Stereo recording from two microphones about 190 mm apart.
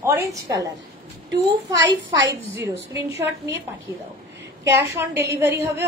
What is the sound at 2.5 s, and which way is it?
Speech, 15° right (ahead or behind).